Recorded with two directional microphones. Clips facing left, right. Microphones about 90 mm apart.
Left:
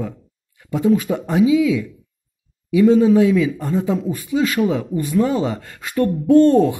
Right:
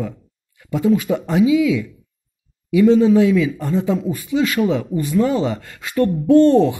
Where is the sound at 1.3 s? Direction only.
20° left (ahead or behind).